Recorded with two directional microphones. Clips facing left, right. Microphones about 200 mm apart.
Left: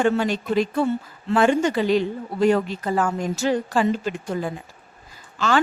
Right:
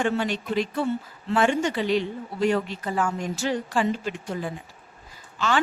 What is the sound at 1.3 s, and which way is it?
A woman's voice, 40° left (ahead or behind).